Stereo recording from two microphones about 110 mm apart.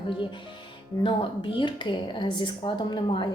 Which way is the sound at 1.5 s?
45° left (ahead or behind).